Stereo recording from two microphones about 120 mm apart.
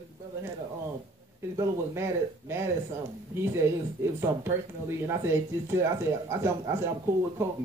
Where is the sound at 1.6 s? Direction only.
20° right (ahead or behind).